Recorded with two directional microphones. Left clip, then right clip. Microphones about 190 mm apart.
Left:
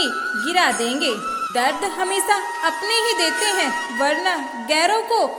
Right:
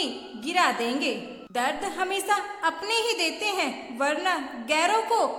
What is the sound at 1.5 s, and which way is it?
A woman's voice, 25° left (ahead or behind).